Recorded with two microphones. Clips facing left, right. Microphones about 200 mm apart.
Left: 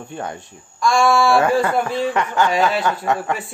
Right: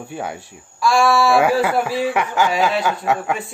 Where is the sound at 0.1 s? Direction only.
5° right (ahead or behind).